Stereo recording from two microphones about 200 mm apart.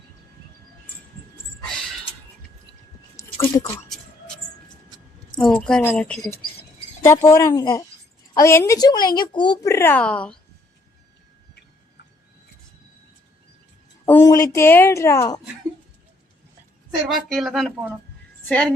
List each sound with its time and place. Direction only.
3.4 s speech: 15° left (ahead or behind)
5.3 s a woman's voice: 5° left (ahead or behind)
14.0 s a woman's voice: 15° left (ahead or behind)
17.1 s a woman's voice: centre (ahead or behind)